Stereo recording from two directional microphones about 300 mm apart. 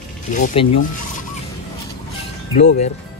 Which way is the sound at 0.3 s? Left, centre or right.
Left.